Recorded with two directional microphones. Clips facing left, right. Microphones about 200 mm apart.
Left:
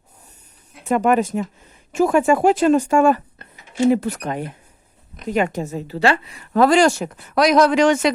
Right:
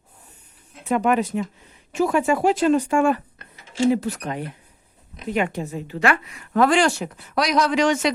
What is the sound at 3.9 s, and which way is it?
A woman's voice, 55° left (ahead or behind).